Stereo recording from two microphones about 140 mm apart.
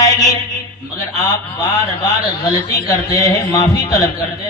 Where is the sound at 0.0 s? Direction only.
25° left (ahead or behind).